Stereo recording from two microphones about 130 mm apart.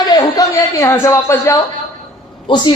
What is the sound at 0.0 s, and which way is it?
Speech, 30° left (ahead or behind).